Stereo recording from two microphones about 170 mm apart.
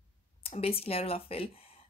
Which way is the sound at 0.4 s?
35° left (ahead or behind).